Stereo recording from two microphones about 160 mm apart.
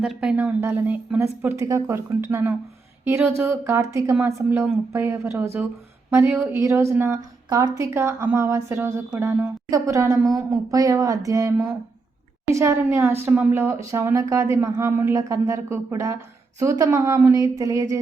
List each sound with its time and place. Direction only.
0.0 s a woman's voice: 5° right (ahead or behind); by 18.0 s 20° right (ahead or behind)